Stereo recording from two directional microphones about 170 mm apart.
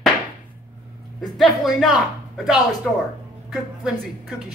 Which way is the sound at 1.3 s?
Centre (ahead or behind).